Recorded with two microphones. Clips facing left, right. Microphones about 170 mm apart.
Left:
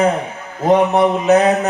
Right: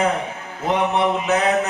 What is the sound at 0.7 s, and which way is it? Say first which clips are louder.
Speech: left 7 dB; 40° left (ahead or behind).